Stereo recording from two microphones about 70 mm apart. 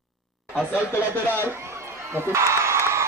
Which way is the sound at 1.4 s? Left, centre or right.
Right.